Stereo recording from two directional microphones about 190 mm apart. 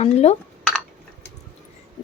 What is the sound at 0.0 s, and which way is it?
Speech, 35° left (ahead or behind).